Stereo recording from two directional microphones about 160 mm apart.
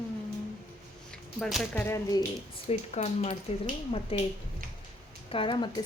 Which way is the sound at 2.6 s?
40° left (ahead or behind).